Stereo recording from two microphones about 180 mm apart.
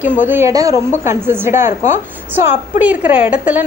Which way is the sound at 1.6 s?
40° left (ahead or behind).